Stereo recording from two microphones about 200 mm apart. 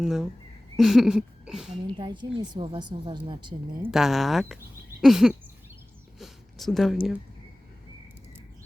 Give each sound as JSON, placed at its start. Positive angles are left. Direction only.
{"t": 0.0, "sound": "speech", "side_deg": 0}
{"t": 2.0, "sound": "a woman's voice", "side_deg": -20}
{"t": 3.8, "sound": "speech", "side_deg": 0}
{"t": 6.1, "sound": "a sound", "side_deg": 0}